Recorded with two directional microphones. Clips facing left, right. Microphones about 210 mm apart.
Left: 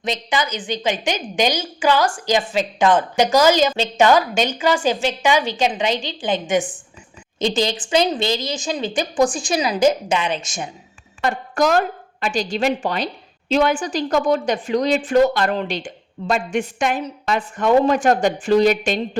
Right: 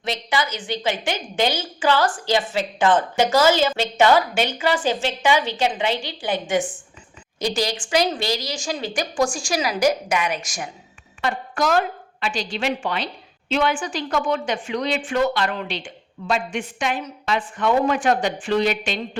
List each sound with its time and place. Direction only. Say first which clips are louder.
0.0 s a woman's voice: left 2 dB; 20° left (ahead or behind)
11.2 s a woman's voice: left 4 dB; 45° left (ahead or behind)